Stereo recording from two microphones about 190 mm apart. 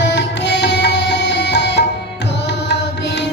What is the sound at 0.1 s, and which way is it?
Music, 65° left (ahead or behind).